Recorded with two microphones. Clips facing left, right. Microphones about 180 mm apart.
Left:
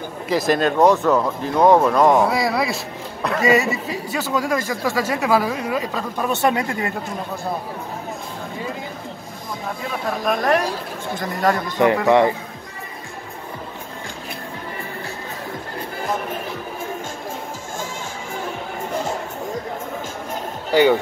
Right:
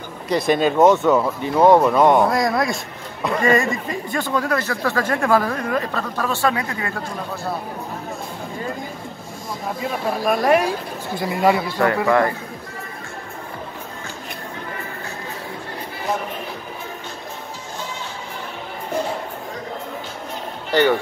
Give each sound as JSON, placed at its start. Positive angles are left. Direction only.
{"t": 0.3, "sound": "speech", "side_deg": 0}
{"t": 10.0, "sound": "speech", "side_deg": -5}
{"t": 12.1, "sound": "a man's voice", "side_deg": 20}
{"t": 20.7, "sound": "speech", "side_deg": 15}